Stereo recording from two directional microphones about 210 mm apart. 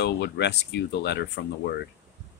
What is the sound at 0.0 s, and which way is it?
Speech, 50° left (ahead or behind).